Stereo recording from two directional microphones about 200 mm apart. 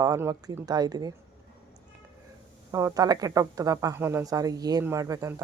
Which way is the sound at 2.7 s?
15° right (ahead or behind).